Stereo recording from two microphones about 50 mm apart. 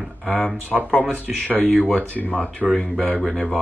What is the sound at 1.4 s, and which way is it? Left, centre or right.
Speech, right.